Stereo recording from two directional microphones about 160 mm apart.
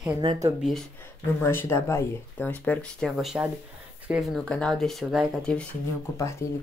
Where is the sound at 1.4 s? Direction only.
15° left (ahead or behind).